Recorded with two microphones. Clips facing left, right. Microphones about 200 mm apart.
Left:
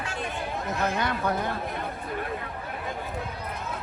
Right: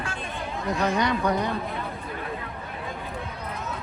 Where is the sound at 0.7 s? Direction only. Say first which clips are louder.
Right 5 dB; 5° left (ahead or behind).